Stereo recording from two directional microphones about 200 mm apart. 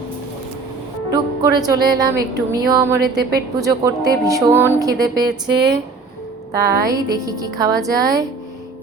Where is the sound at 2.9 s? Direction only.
55° right (ahead or behind).